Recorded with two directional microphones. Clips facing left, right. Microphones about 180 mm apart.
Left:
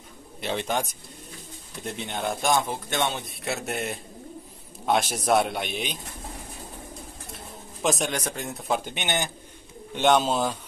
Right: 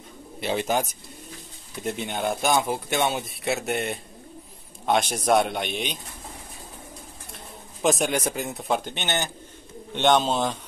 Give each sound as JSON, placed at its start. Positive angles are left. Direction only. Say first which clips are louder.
{"t": 0.4, "sound": "speech", "louder": "right 3 dB", "side_deg": -5}
{"t": 7.8, "sound": "speech", "louder": "right 3 dB", "side_deg": 0}
{"t": 8.9, "sound": "speech", "louder": "even", "side_deg": 15}